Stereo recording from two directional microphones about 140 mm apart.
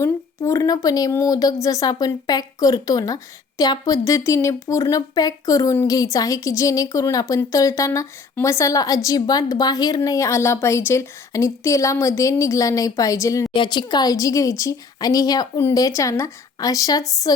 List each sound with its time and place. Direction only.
0.0 s a woman's voice: 20° left (ahead or behind)
13.5 s a woman's voice: 35° left (ahead or behind)